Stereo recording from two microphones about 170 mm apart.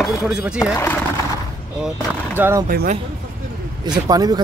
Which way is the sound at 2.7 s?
60° right (ahead or behind).